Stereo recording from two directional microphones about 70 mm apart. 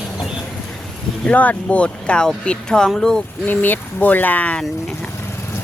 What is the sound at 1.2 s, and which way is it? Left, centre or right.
Speech, left.